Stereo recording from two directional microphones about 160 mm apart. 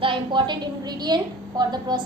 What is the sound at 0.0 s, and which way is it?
A woman's voice, 30° right (ahead or behind).